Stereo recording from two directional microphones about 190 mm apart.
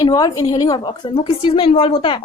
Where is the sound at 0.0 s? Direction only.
20° left (ahead or behind).